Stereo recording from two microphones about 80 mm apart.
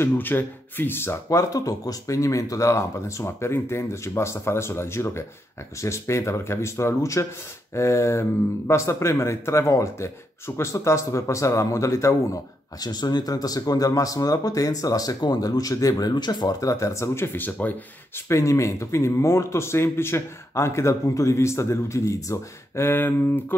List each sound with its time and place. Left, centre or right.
0.0 s speech: left
12.8 s speech: left
18.3 s speech: left